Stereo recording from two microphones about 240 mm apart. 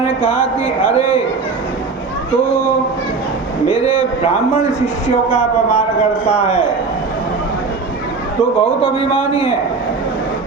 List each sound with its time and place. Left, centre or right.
0.2 s a man's voice: left
3.7 s a man's voice: left
5.3 s a man's voice: left
8.8 s a man's voice: left